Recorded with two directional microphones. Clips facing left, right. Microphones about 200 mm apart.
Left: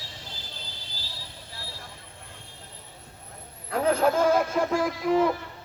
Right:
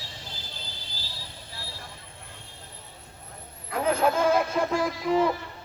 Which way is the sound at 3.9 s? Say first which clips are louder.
Left 1 dB; 40° left (ahead or behind).